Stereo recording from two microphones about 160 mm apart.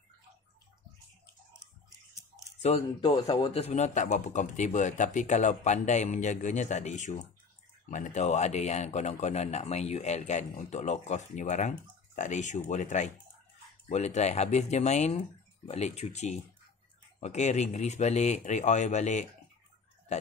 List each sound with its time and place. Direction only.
2.7 s a man's voice: 45° left (ahead or behind)
3.0 s a man's voice: 30° left (ahead or behind)
10.5 s speech: 65° left (ahead or behind)
10.8 s a man's voice: 45° left (ahead or behind)